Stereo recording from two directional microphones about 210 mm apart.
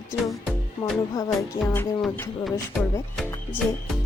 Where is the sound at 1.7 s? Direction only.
10° left (ahead or behind).